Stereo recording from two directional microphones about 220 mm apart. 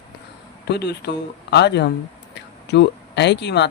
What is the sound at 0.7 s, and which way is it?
Speech, 50° left (ahead or behind).